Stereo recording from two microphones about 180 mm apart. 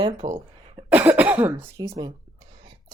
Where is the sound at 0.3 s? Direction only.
35° right (ahead or behind).